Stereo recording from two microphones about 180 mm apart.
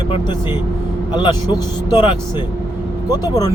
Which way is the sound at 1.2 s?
25° left (ahead or behind).